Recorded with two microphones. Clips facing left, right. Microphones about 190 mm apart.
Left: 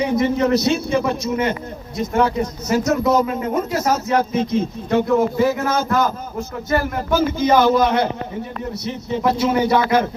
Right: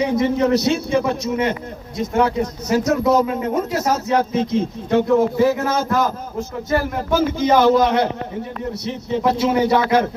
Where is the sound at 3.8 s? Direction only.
30° right (ahead or behind).